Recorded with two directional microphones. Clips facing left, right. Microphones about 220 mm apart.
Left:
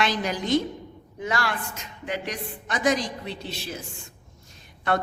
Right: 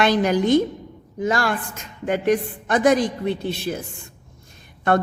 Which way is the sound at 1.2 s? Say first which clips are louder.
Right 6 dB; 45° right (ahead or behind).